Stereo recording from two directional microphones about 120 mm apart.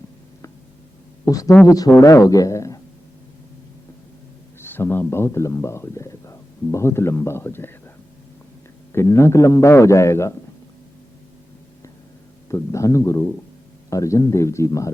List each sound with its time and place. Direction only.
1.2 s a man's voice: 30° left (ahead or behind)
4.6 s speech: 20° left (ahead or behind)
8.9 s a man's voice: 20° left (ahead or behind)
12.5 s a man's voice: 25° left (ahead or behind)